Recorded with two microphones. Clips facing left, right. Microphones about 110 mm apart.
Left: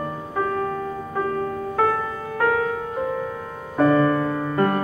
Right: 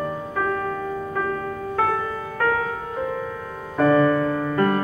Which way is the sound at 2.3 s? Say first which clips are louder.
Left 2 dB; 10° left (ahead or behind).